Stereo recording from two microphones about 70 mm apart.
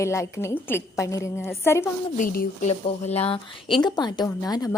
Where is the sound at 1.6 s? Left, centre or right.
Left.